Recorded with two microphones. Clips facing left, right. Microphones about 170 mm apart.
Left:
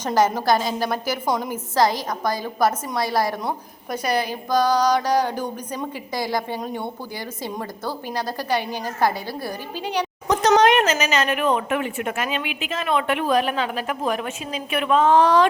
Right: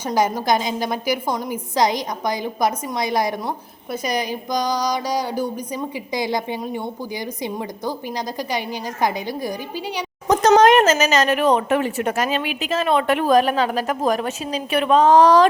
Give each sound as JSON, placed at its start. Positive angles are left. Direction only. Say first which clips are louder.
{"t": 0.0, "sound": "a woman's voice", "louder": "left 1 dB", "side_deg": -10}
{"t": 10.6, "sound": "a woman's voice", "louder": "right 4 dB", "side_deg": -45}